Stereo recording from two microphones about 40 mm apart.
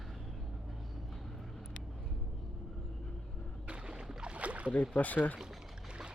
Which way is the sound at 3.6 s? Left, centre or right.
Right.